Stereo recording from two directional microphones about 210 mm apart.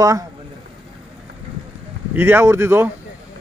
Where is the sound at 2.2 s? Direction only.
10° right (ahead or behind).